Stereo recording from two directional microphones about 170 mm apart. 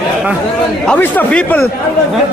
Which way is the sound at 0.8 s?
10° left (ahead or behind).